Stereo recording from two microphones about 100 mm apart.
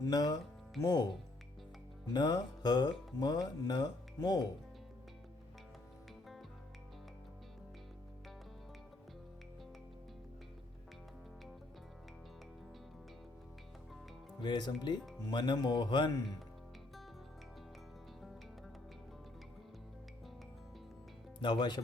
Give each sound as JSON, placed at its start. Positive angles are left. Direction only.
{"t": 0.0, "sound": "music", "side_deg": 45}
{"t": 0.8, "sound": "speech", "side_deg": 40}
{"t": 2.1, "sound": "speech", "side_deg": 45}
{"t": 14.4, "sound": "speech", "side_deg": 45}
{"t": 21.4, "sound": "speech", "side_deg": 45}